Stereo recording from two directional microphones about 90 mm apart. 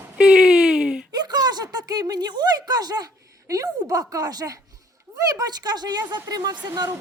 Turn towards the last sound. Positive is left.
turn(degrees=-45)  # may be behind; listen again after turning